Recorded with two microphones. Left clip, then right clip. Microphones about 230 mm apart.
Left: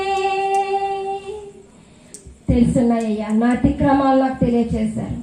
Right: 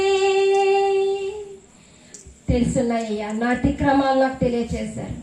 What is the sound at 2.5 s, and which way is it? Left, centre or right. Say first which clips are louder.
A woman's voice: left 3 dB; right.